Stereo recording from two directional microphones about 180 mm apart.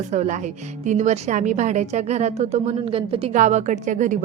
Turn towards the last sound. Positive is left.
turn(degrees=-45)  # may be behind; listen again after turning